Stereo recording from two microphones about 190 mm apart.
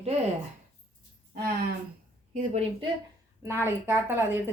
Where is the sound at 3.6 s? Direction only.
10° right (ahead or behind).